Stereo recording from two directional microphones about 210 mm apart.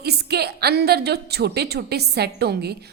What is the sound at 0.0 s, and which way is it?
A woman's voice, 50° right (ahead or behind).